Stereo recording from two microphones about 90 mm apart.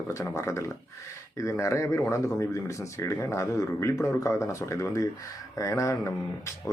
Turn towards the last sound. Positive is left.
turn(degrees=35)  # may be behind; listen again after turning